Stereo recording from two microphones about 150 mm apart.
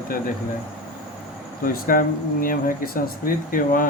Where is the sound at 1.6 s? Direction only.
70° left (ahead or behind).